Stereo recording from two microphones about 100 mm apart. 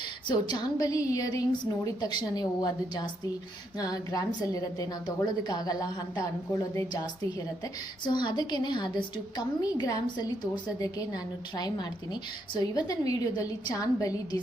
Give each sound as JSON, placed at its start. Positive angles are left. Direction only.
{"t": 0.3, "sound": "a woman's voice", "side_deg": 40}